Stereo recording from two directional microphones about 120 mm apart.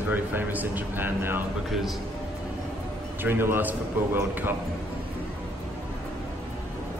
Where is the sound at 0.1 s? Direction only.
15° right (ahead or behind).